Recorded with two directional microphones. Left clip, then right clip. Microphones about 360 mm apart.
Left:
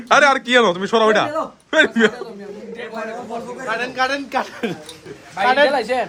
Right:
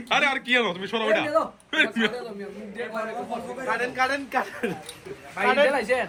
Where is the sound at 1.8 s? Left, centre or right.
Left.